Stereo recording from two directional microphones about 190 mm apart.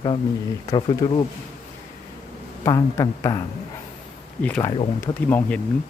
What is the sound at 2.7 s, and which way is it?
Speech, 20° left (ahead or behind).